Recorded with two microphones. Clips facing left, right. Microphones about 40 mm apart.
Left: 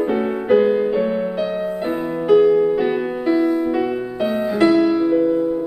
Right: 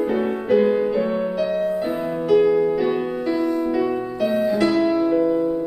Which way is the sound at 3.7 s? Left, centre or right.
Centre.